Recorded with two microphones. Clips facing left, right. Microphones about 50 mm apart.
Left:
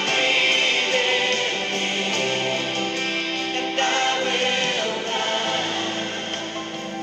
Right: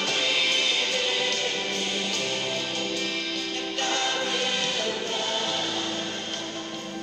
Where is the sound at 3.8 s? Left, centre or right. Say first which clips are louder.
Left 6 dB; left.